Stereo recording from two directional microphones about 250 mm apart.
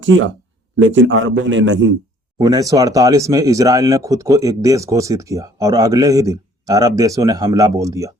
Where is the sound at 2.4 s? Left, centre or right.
Centre.